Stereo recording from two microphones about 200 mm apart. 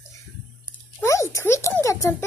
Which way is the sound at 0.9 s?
15° left (ahead or behind).